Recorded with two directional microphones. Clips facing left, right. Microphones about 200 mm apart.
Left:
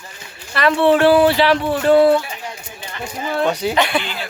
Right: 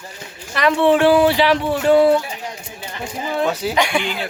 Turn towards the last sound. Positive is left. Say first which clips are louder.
# even
turn(degrees=-15)  # may be behind; listen again after turning